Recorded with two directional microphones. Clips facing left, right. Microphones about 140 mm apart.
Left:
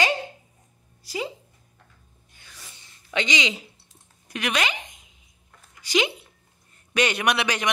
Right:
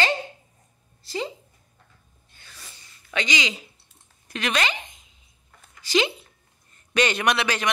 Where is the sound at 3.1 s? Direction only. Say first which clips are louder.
Left 1 dB; 25° left (ahead or behind).